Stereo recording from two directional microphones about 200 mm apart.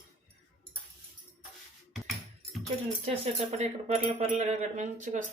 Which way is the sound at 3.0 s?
35° right (ahead or behind).